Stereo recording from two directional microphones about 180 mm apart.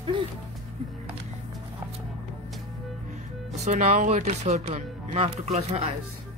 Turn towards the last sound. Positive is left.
turn(degrees=-35)  # may be behind; listen again after turning